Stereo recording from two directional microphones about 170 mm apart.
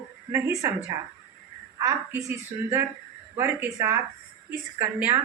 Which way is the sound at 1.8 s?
15° right (ahead or behind).